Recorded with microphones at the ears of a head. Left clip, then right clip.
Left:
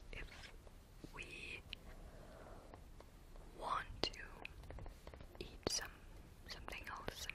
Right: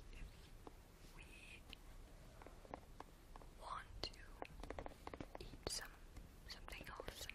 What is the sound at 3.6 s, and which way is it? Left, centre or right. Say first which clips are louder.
Whispering: left 9 dB; left.